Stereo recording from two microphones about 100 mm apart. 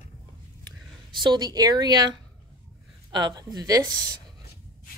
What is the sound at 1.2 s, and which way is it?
A woman's voice, 45° right (ahead or behind).